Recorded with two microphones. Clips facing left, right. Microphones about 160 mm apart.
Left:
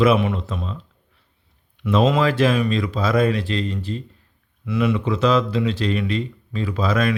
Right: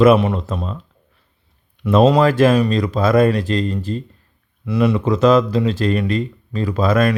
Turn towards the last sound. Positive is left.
turn(degrees=-50)  # may be behind; listen again after turning